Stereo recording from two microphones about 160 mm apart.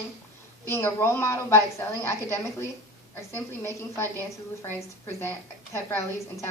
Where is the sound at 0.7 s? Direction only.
15° left (ahead or behind).